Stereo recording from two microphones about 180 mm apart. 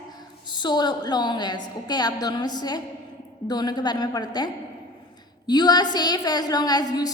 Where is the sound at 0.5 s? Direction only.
25° left (ahead or behind).